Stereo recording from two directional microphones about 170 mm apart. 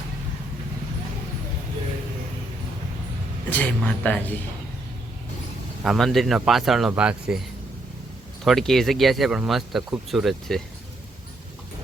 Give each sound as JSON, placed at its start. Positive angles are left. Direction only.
{"t": 3.5, "sound": "speech", "side_deg": 10}
{"t": 5.8, "sound": "speech", "side_deg": 0}
{"t": 8.4, "sound": "speech", "side_deg": 0}